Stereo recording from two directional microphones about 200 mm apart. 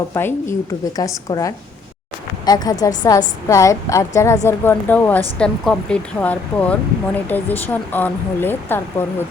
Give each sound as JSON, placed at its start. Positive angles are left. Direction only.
{"t": 0.1, "sound": "speech", "side_deg": 10}